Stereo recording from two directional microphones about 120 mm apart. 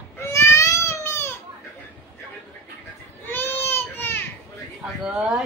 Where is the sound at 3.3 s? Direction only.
20° left (ahead or behind).